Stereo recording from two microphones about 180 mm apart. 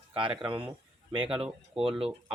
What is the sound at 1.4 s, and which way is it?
Speech, 5° right (ahead or behind).